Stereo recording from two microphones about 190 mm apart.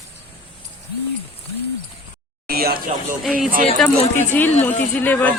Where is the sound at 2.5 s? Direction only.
55° right (ahead or behind).